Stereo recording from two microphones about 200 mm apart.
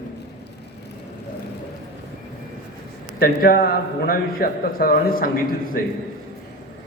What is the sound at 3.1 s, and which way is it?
A man's voice, 45° left (ahead or behind).